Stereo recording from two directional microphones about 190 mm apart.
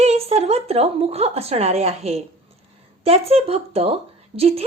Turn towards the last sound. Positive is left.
turn(degrees=-30)  # may be behind; listen again after turning